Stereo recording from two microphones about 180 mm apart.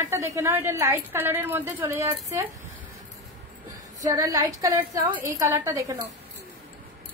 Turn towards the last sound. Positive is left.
turn(degrees=-15)  # may be behind; listen again after turning